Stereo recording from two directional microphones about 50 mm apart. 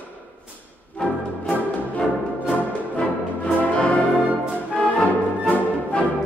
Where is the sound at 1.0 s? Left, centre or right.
Left.